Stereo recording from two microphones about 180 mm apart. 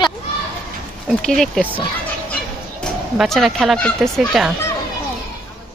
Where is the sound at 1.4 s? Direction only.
Centre (ahead or behind).